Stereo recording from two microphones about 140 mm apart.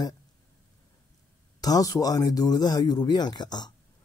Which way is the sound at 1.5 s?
25° left (ahead or behind).